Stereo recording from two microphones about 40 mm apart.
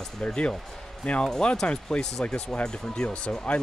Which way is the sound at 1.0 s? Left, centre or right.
Left.